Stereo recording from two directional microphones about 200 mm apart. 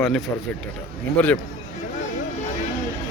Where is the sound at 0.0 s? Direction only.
Centre (ahead or behind).